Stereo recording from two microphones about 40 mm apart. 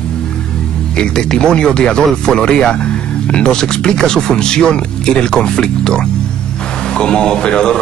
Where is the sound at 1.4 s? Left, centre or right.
Left.